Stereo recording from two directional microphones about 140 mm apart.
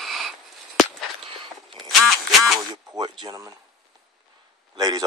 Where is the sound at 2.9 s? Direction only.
25° right (ahead or behind).